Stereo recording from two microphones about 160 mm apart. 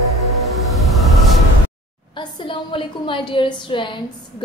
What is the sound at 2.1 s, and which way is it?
A woman's voice, 30° left (ahead or behind).